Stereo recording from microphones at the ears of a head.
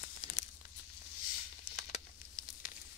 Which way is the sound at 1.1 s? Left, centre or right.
Left.